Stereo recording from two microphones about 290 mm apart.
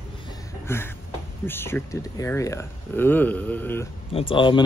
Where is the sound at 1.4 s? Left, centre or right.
Centre.